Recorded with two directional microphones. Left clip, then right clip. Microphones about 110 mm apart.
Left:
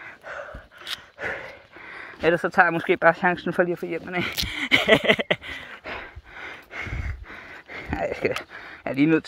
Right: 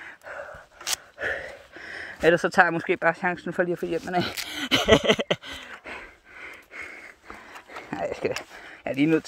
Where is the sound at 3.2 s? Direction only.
40° left (ahead or behind).